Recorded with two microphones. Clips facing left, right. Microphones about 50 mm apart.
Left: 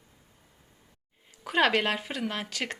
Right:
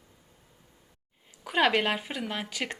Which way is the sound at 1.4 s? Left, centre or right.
Centre.